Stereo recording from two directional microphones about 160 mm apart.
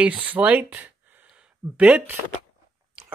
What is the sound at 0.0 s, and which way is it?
Speech, 10° right (ahead or behind).